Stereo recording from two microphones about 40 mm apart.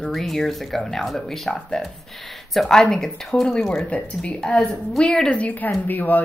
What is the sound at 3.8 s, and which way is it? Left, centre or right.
Speech, left.